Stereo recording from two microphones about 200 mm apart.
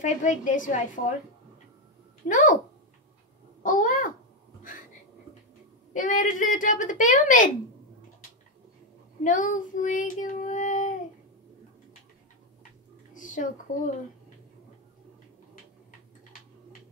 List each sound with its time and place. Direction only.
0.0 s a woman's voice: 40° left (ahead or behind)
2.2 s a woman's voice: 40° left (ahead or behind)
3.6 s a woman's voice: 40° left (ahead or behind)
5.9 s a woman's voice: 40° left (ahead or behind)
9.2 s child singing: 40° left (ahead or behind)
13.1 s speech: 40° left (ahead or behind)